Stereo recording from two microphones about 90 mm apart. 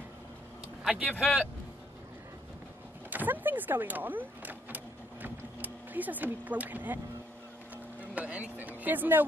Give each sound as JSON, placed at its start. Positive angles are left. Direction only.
{"t": 0.8, "sound": "speech", "side_deg": -15}
{"t": 3.1, "sound": "speech", "side_deg": -20}
{"t": 7.7, "sound": "a sound", "side_deg": -15}